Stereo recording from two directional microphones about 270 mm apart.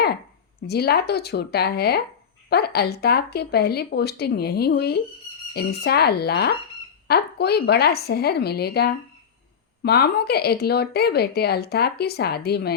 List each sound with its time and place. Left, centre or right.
0.7 s speech: left